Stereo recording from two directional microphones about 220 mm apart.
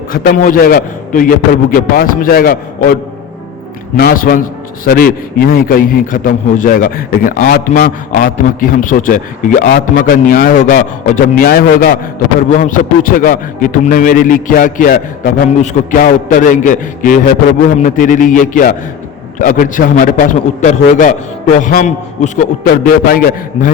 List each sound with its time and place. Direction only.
0.1 s a man's voice: 40° left (ahead or behind)